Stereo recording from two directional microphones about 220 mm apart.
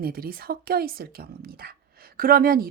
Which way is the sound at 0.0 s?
45° right (ahead or behind).